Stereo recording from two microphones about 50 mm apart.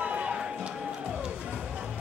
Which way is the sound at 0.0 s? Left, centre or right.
Right.